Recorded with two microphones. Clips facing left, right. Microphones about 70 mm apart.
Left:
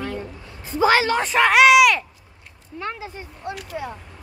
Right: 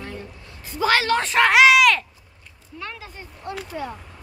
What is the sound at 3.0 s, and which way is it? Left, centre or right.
Speech, centre.